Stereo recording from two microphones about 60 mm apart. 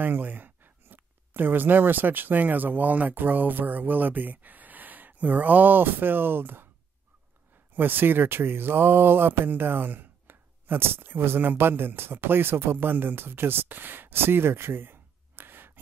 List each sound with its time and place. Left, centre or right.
0.0 s speech: right
7.7 s speech: right